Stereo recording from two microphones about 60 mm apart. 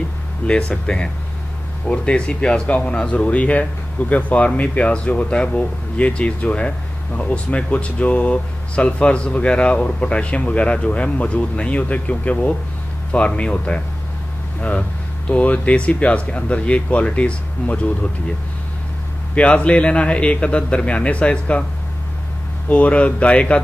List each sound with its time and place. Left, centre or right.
0.5 s speech: centre
19.3 s speech: left
22.7 s speech: left